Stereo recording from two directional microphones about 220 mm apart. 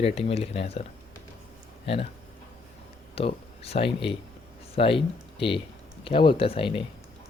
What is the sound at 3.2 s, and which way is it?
A man's voice, 25° left (ahead or behind).